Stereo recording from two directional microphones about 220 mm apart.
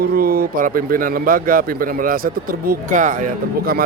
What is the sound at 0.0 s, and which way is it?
A man's voice, 40° right (ahead or behind).